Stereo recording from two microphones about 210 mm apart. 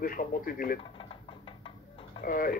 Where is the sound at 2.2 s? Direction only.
40° left (ahead or behind).